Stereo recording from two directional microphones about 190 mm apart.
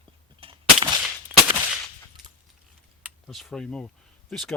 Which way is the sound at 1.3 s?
5° right (ahead or behind).